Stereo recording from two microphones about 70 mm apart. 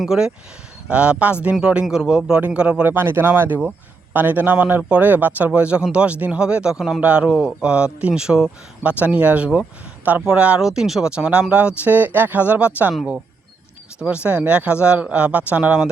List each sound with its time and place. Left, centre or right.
0.0 s speech: centre
2.8 s speech: right
10.6 s speech: centre; by 12.9 s right
14.0 s speech: centre